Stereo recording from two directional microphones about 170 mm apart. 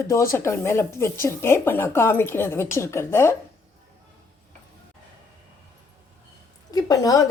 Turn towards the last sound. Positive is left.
turn(degrees=20)  # may be behind; listen again after turning